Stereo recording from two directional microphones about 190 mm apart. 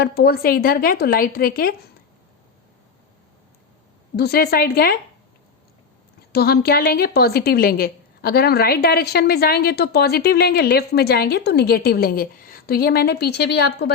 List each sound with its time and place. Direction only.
0.0 s a woman's voice: 55° left (ahead or behind)
4.2 s a woman's voice: 55° left (ahead or behind)
6.3 s a woman's voice: 55° left (ahead or behind)